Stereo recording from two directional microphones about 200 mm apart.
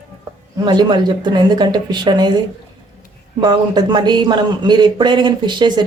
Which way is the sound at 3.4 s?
20° right (ahead or behind).